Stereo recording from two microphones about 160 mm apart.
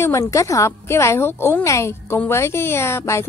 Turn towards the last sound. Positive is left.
turn(degrees=15)  # may be behind; listen again after turning